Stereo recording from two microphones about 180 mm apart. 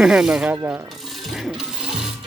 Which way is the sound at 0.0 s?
5° right (ahead or behind).